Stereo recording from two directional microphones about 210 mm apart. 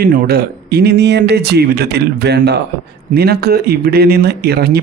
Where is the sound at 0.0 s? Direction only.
45° right (ahead or behind).